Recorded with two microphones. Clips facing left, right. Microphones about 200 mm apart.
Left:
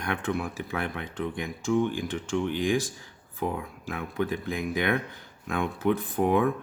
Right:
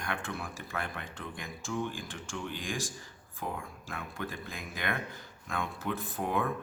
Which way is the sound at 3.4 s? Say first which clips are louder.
Left 8 dB; 60° left (ahead or behind).